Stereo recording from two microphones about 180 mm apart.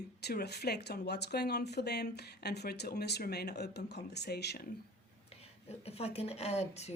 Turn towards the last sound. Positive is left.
turn(degrees=35)  # may be behind; listen again after turning